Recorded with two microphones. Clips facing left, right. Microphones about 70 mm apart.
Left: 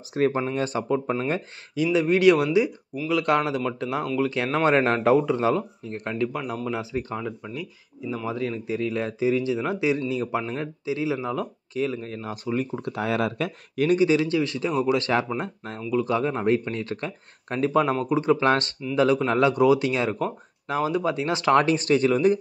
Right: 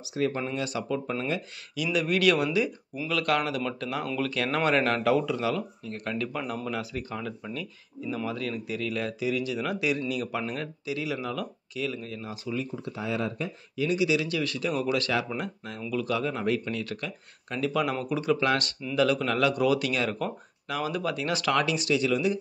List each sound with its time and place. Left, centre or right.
0.3 s speech: left
0.6 s speech: left
6.3 s speech: centre
6.7 s speech: left
12.9 s speech: left
13.8 s speech: left